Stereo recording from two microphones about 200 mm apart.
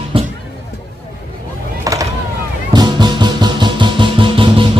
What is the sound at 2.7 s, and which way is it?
Music, 20° right (ahead or behind).